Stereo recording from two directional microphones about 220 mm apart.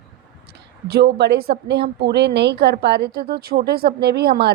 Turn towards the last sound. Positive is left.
turn(degrees=-45)  # may be behind; listen again after turning